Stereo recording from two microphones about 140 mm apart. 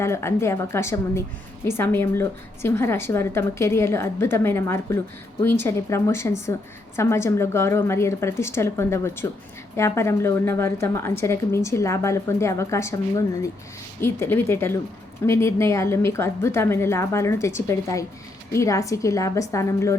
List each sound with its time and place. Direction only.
0.0 s a woman's voice: 20° left (ahead or behind)